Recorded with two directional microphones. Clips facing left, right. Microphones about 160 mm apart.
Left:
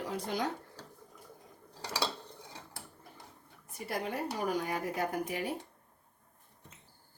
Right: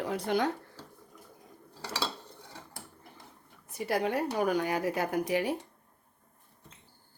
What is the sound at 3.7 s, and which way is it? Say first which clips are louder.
Speech: right 7 dB; 75° right (ahead or behind).